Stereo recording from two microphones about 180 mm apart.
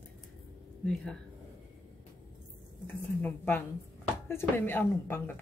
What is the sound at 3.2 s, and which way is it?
A woman's voice, 10° left (ahead or behind).